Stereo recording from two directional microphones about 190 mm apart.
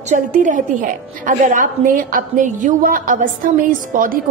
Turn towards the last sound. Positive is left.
turn(degrees=-45)  # may be behind; listen again after turning